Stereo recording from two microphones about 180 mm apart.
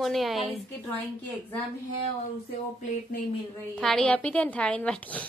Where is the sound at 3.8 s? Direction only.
5° left (ahead or behind).